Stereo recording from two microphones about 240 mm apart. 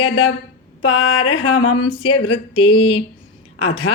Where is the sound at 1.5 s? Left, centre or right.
Left.